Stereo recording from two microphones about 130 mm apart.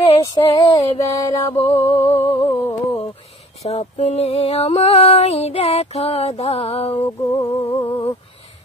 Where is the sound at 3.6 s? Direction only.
60° left (ahead or behind).